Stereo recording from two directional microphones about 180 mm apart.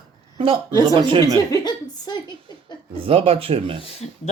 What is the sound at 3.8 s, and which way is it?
Speech, 35° left (ahead or behind).